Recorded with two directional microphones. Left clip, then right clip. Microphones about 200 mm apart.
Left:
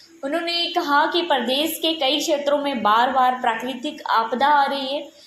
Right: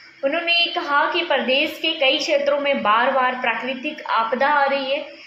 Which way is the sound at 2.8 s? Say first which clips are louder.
Even; 35° left (ahead or behind).